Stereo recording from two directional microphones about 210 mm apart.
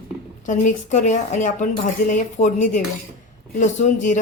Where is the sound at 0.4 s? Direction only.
35° left (ahead or behind).